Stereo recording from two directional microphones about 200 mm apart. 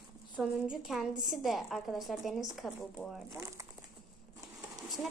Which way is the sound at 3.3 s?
15° right (ahead or behind).